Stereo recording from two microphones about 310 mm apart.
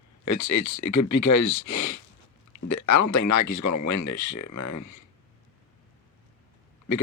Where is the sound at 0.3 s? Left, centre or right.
Left.